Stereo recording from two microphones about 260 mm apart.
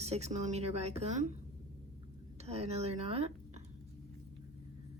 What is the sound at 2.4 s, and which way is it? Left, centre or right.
Speech, right.